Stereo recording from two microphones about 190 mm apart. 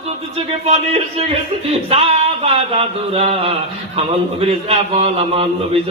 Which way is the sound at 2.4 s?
35° right (ahead or behind).